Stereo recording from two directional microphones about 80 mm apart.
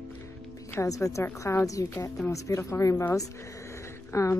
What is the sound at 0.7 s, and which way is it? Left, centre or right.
A woman's voice, left.